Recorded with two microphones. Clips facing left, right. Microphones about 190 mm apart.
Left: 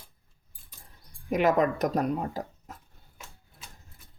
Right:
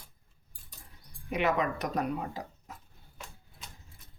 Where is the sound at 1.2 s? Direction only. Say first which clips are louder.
Left 6 dB; 45° left (ahead or behind).